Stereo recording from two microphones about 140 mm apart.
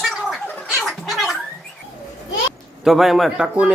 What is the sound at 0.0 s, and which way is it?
Gargling, centre (ahead or behind).